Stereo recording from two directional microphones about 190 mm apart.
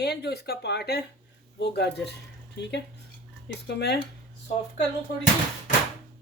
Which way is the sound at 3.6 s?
60° left (ahead or behind).